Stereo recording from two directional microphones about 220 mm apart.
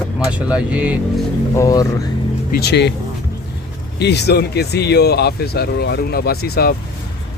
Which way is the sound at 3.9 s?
50° left (ahead or behind).